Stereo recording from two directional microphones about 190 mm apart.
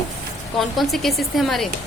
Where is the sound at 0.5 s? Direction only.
Centre (ahead or behind).